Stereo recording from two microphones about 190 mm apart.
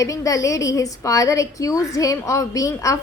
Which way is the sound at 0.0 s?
15° left (ahead or behind).